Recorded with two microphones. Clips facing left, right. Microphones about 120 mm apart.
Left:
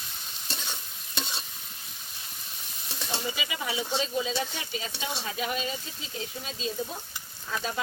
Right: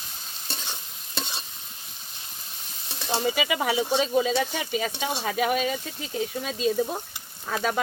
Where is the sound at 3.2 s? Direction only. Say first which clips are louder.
Right 11 dB; 65° right (ahead or behind).